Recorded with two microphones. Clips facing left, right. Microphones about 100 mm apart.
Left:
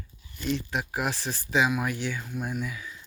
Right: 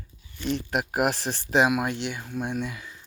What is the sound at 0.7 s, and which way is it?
Speech, 55° right (ahead or behind).